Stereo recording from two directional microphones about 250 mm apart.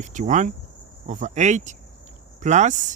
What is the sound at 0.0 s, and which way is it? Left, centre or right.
Speech, right.